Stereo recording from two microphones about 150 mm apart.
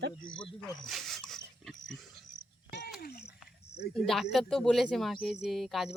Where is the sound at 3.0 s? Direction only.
90° left.